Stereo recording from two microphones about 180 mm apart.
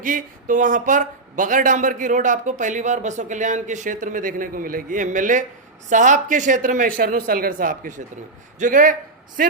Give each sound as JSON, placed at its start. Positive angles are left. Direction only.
{"t": 0.0, "sound": "speech", "side_deg": -50}